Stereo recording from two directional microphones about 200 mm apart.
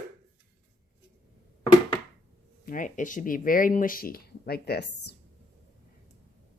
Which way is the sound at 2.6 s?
40° left (ahead or behind).